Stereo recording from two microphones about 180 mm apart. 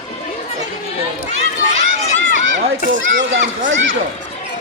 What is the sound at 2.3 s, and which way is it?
Children playing, 90° right.